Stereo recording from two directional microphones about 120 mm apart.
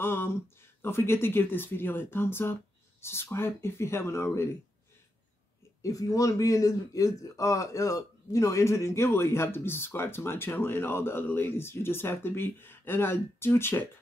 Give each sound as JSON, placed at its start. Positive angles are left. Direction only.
{"t": 0.0, "sound": "a man's voice", "side_deg": 20}
{"t": 5.8, "sound": "a man's voice", "side_deg": 30}